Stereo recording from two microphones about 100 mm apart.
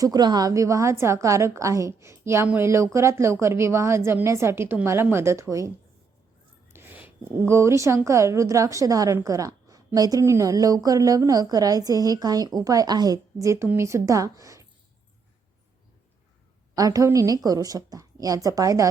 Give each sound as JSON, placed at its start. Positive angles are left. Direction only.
{"t": 0.0, "sound": "a woman's voice", "side_deg": -40}
{"t": 6.7, "sound": "a woman's voice", "side_deg": -20}
{"t": 16.7, "sound": "a woman's voice", "side_deg": -35}